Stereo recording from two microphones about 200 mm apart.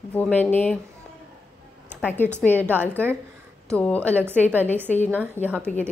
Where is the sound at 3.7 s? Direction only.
5° left (ahead or behind).